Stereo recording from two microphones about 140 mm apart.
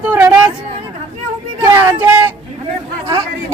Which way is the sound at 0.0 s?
15° right (ahead or behind).